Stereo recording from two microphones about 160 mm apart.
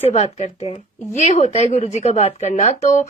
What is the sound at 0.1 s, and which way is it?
A woman's voice, 45° left (ahead or behind).